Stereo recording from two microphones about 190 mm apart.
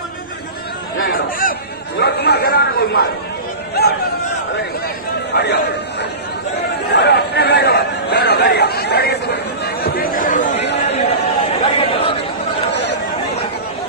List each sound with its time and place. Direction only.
1.0 s chatter: 50° left (ahead or behind)
2.0 s speech: 60° left (ahead or behind)
5.3 s chatter: 60° left (ahead or behind); by 10.6 s 40° left (ahead or behind)
10.6 s chatter: 65° left (ahead or behind)
11.6 s chatter: 30° left (ahead or behind)